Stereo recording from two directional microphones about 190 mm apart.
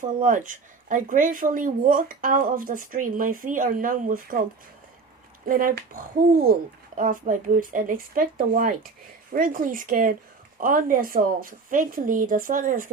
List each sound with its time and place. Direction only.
0.0 s speech: 45° right (ahead or behind)
5.5 s speech: 45° right (ahead or behind)